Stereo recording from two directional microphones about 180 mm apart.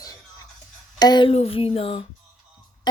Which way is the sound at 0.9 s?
25° left (ahead or behind).